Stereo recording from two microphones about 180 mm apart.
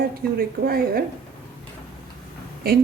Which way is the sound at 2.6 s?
55° right (ahead or behind).